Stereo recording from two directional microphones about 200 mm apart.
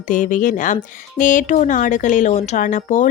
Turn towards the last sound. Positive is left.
turn(degrees=40)  # may be behind; listen again after turning